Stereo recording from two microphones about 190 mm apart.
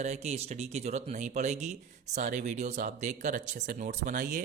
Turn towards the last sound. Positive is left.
turn(degrees=-45)  # may be behind; listen again after turning